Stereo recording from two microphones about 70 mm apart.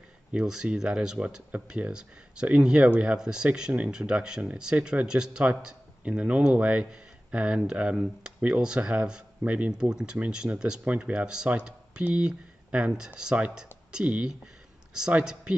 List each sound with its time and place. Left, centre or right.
0.3 s speech: centre